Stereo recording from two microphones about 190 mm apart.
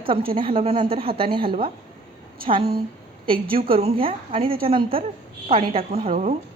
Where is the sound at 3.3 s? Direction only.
30° right (ahead or behind).